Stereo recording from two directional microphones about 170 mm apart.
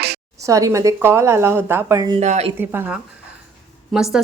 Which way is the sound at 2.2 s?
45° right (ahead or behind).